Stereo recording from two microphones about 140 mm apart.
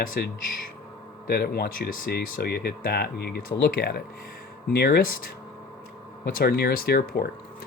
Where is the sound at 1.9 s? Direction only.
90° left.